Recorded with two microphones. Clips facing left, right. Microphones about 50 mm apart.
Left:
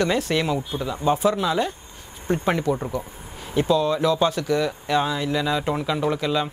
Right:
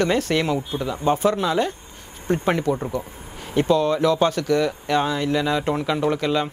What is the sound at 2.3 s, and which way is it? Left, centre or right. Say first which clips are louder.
Speech: right 1 dB; right.